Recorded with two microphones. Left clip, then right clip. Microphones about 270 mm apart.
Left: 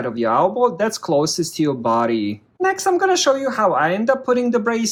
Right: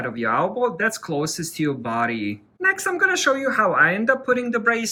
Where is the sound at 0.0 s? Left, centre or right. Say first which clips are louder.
Left 5 dB; centre.